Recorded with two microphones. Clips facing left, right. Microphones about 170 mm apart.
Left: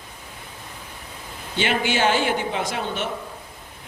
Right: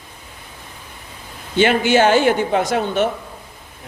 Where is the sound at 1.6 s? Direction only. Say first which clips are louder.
Right 8 dB; 50° right (ahead or behind).